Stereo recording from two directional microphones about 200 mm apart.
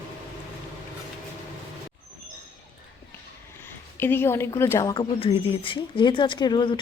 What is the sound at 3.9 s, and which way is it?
A woman's voice, 10° left (ahead or behind).